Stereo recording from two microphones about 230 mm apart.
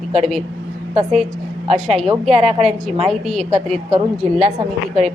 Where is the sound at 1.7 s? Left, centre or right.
Centre.